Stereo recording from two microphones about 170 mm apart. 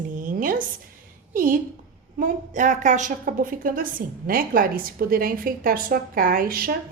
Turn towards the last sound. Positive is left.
turn(degrees=-60)  # may be behind; listen again after turning